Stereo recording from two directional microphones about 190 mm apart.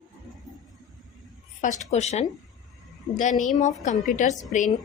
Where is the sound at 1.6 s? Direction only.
40° left (ahead or behind).